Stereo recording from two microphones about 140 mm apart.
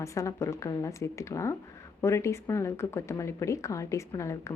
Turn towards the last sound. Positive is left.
turn(degrees=20)  # may be behind; listen again after turning